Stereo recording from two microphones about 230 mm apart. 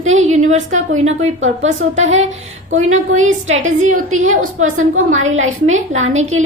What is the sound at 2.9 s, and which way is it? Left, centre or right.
A woman's voice, right.